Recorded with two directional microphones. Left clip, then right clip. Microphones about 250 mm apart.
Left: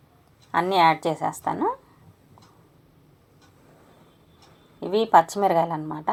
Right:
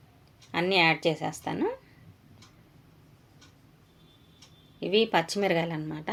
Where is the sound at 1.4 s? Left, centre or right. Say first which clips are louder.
Left 4 dB; centre.